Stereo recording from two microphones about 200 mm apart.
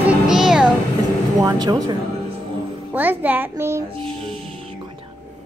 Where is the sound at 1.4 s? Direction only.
20° right (ahead or behind).